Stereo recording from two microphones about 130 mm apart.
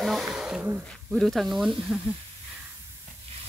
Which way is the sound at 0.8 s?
Centre (ahead or behind).